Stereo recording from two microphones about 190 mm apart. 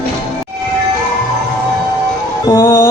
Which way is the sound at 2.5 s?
15° left (ahead or behind).